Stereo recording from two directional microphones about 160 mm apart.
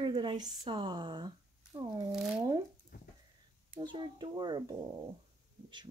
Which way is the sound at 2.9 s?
65° left (ahead or behind).